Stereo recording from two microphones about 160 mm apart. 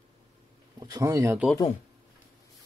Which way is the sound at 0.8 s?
25° right (ahead or behind).